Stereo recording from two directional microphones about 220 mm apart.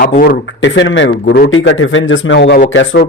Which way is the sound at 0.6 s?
55° left (ahead or behind).